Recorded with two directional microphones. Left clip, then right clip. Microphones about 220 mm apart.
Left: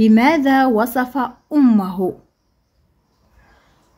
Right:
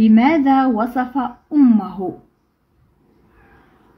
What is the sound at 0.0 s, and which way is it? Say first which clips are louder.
A woman's voice: even; 50° left (ahead or behind).